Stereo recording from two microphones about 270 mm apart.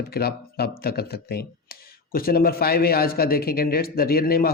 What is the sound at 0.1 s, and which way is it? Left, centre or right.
A man's voice, left.